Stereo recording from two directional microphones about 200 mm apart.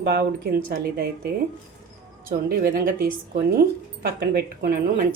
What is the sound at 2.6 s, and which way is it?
Speech, 50° right (ahead or behind).